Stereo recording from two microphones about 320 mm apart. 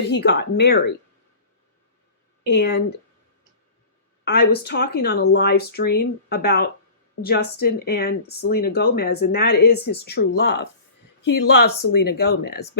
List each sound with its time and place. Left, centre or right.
0.1 s speech: left
2.5 s speech: left
4.3 s speech: left